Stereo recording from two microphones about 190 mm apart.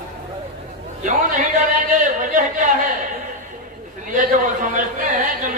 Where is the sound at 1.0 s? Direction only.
40° right (ahead or behind).